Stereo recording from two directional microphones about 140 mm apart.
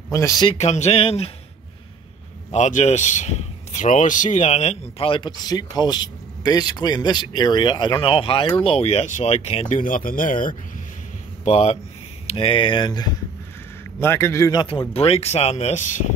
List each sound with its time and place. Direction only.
0.1 s a man's voice: 25° left (ahead or behind)
0.5 s speech: 55° left (ahead or behind)
2.5 s speech: 55° left (ahead or behind)
9.7 s speech: 70° left (ahead or behind)
11.4 s speech: 50° left (ahead or behind)
12.4 s speech: 40° left (ahead or behind)
14.0 s a man's voice: 15° left (ahead or behind)
14.7 s speech: 40° left (ahead or behind); by 16.0 s 60° left (ahead or behind)